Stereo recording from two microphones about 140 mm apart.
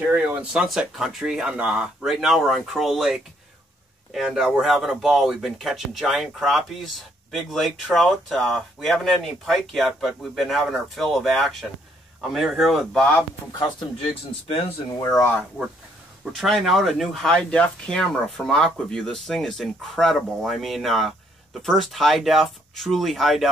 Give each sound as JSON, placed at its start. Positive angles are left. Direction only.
{"t": 0.1, "sound": "speech", "side_deg": -10}
{"t": 13.6, "sound": "speech", "side_deg": 35}
{"t": 16.3, "sound": "speech", "side_deg": 0}